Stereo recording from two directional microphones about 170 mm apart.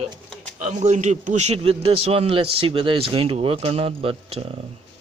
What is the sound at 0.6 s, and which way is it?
A man's voice, 45° right (ahead or behind).